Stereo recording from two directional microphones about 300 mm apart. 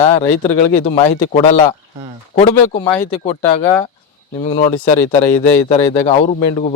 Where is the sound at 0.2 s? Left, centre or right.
Left.